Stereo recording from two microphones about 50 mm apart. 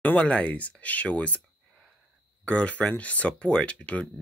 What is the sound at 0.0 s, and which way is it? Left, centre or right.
Speech, left.